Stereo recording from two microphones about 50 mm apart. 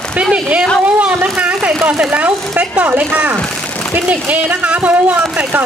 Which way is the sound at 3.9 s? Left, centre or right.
Right.